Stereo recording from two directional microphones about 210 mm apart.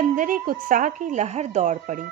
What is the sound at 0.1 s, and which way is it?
A woman's voice, 40° right (ahead or behind).